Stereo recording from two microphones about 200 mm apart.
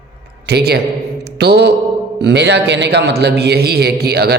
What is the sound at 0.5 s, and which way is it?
A man's voice, 55° right (ahead or behind).